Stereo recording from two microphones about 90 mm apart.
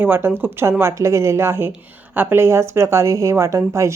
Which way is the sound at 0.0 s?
25° right (ahead or behind).